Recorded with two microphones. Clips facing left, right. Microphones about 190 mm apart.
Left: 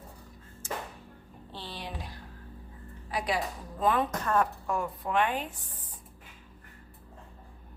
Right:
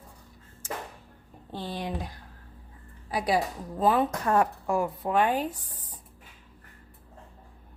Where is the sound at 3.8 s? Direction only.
25° right (ahead or behind).